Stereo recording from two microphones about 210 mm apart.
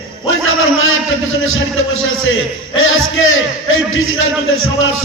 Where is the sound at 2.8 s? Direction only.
70° left (ahead or behind).